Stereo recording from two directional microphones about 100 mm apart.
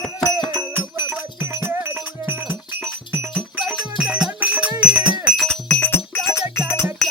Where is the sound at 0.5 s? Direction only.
25° right (ahead or behind).